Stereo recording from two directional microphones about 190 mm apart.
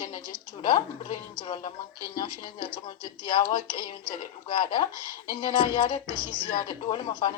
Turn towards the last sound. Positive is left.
turn(degrees=25)  # may be behind; listen again after turning